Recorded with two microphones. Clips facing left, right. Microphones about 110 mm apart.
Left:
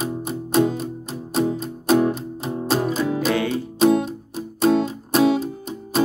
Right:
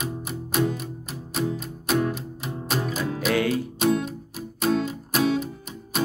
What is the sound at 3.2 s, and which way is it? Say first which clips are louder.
Music: right 3 dB; centre (ahead or behind).